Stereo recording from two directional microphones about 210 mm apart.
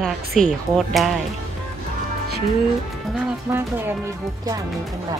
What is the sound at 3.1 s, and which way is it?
Speech, 10° right (ahead or behind).